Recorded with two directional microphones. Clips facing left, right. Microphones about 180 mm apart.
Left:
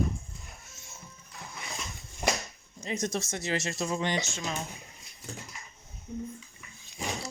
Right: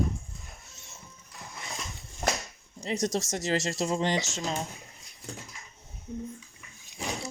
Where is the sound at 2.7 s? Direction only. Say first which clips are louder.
Right 3 dB; 35° right (ahead or behind).